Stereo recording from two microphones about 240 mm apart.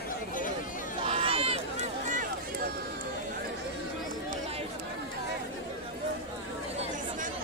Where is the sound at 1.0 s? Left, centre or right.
Right.